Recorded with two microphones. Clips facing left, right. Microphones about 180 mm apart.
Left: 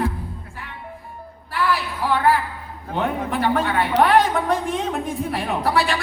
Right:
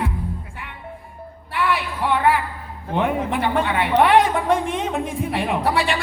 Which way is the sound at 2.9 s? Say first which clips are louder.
Right 2 dB; 25° right (ahead or behind).